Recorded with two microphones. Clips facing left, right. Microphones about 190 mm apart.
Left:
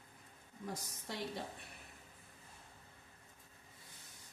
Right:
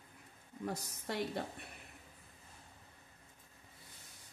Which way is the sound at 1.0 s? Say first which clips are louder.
Right 5 dB; 60° right (ahead or behind).